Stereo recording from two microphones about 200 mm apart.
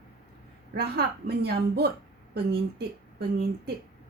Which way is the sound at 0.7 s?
55° right (ahead or behind).